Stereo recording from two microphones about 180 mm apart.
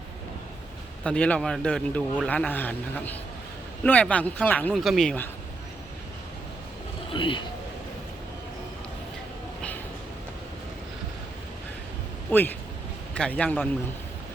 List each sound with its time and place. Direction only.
1.0 s speech: 5° left (ahead or behind)
7.1 s speech: 30° left (ahead or behind)
12.3 s speech: 10° left (ahead or behind)